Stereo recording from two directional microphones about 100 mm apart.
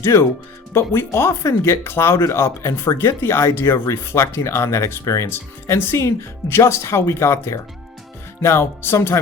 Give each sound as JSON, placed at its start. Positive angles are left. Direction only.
{"t": 0.0, "sound": "speech", "side_deg": 25}